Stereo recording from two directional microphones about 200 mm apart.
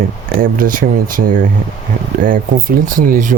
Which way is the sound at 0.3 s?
45° right (ahead or behind).